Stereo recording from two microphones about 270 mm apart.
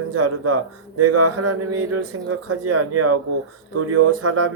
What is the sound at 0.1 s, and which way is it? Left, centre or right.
Speech, right.